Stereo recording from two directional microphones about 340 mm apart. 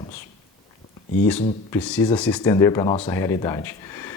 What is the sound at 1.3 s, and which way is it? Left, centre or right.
Speech, centre.